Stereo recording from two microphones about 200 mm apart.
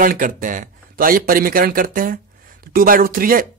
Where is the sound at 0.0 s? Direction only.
45° right (ahead or behind).